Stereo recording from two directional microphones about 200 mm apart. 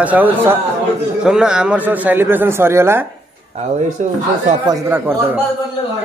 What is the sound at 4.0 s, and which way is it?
Speech, 35° right (ahead or behind).